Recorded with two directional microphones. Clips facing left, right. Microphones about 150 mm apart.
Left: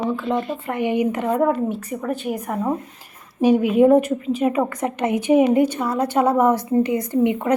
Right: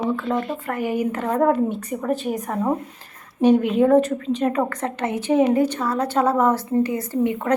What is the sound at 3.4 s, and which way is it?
A woman's voice, 10° left (ahead or behind).